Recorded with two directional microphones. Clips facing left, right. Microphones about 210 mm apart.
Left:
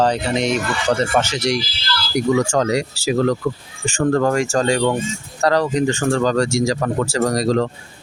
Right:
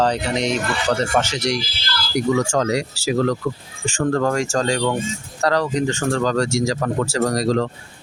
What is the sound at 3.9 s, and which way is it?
Speech, 15° left (ahead or behind).